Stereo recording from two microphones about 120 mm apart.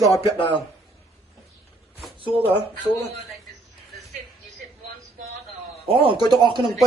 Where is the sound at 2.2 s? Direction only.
50° right (ahead or behind).